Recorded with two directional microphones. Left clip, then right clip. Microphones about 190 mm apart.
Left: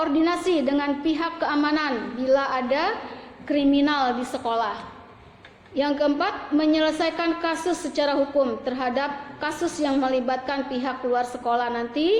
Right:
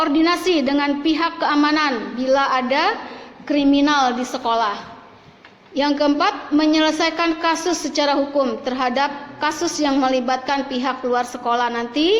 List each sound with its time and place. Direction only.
0.0 s a woman's voice: 30° right (ahead or behind)